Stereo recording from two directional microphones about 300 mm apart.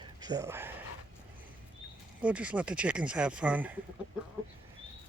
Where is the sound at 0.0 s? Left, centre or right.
Centre.